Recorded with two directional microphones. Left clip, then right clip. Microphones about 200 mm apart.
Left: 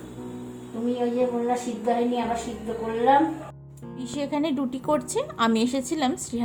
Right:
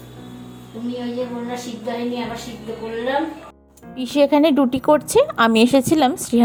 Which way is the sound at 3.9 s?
35° right (ahead or behind).